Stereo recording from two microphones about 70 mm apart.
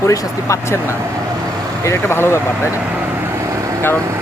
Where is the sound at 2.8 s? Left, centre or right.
Right.